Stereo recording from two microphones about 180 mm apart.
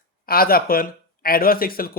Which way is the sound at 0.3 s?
55° left (ahead or behind).